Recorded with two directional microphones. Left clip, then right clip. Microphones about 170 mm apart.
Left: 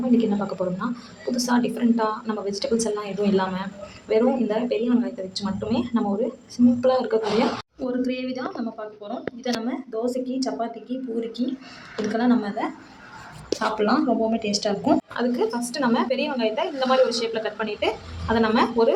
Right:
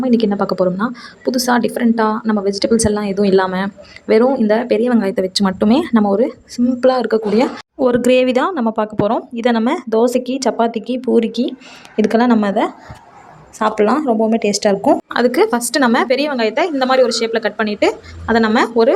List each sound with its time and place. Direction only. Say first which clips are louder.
0.1 s a woman's voice: right 6 dB; 40° right (ahead or behind)
7.8 s speech: right 18 dB; 65° right (ahead or behind)
13.6 s speech: right 8 dB; 30° right (ahead or behind)
15.1 s a woman's voice: right 11 dB; 45° right (ahead or behind)